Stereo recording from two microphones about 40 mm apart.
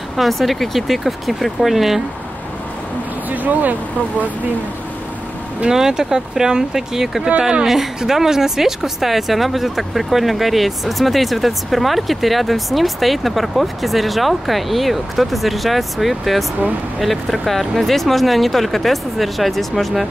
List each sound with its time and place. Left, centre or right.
0.1 s speech: centre
3.3 s speech: right
5.7 s speech: centre